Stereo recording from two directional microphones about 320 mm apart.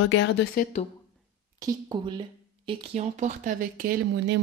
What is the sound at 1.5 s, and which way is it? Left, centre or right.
Speech, centre.